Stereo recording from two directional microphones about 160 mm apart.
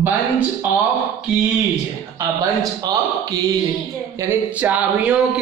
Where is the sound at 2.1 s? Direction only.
20° right (ahead or behind).